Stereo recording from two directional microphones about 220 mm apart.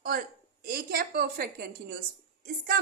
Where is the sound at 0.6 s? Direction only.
40° right (ahead or behind).